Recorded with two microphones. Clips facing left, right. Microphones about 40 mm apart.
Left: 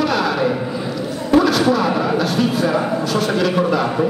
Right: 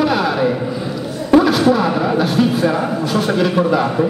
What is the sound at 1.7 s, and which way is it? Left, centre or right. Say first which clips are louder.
A man's voice: right 2 dB; centre.